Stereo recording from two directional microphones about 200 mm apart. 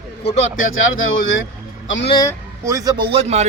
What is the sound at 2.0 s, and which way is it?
Speech, 25° left (ahead or behind).